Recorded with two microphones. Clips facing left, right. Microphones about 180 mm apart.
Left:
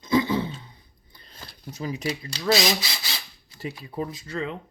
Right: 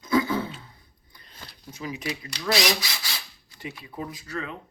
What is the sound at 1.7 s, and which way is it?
Speech, 35° left (ahead or behind).